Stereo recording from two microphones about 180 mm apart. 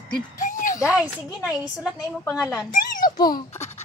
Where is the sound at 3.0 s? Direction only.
20° left (ahead or behind).